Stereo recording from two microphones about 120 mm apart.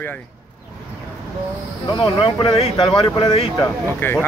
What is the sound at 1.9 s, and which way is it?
Speech, 40° left (ahead or behind).